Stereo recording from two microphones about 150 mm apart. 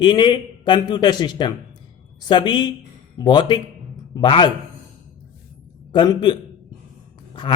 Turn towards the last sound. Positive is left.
turn(degrees=30)  # may be behind; listen again after turning